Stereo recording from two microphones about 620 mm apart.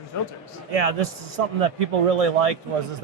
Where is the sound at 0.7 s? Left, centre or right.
Right.